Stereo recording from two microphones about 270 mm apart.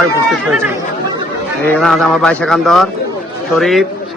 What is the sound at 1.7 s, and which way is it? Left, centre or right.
Speech, centre.